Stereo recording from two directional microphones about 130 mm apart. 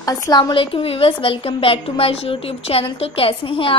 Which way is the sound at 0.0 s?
30° left (ahead or behind).